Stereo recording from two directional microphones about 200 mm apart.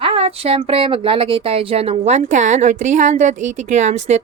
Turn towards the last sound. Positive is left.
turn(degrees=-35)  # may be behind; listen again after turning